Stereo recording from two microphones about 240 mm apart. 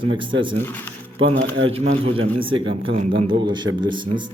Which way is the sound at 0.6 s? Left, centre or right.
Centre.